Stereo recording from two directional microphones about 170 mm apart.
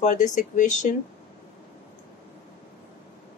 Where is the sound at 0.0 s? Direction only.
45° left (ahead or behind).